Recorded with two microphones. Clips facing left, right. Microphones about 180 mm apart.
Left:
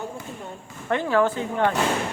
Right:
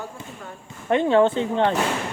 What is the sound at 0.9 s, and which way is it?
Speech, 25° right (ahead or behind).